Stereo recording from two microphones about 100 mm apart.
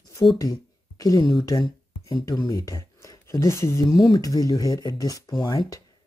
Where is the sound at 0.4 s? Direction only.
35° left (ahead or behind).